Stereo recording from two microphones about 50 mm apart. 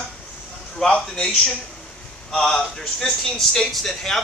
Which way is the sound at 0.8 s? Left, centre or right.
Centre.